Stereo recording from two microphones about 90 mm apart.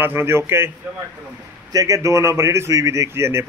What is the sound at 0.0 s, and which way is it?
Speech, 25° right (ahead or behind).